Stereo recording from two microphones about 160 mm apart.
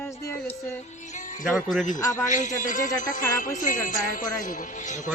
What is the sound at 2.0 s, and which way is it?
Speech, 20° left (ahead or behind).